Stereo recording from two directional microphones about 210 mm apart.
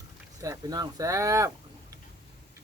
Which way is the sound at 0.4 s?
20° right (ahead or behind).